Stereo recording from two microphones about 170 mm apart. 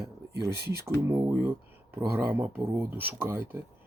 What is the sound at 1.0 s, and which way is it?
Speech, 15° right (ahead or behind).